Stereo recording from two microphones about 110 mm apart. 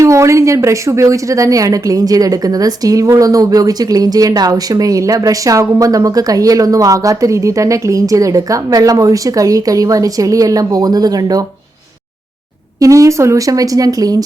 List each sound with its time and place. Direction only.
0.0 s speech: 25° right (ahead or behind)
12.8 s speech: 30° right (ahead or behind)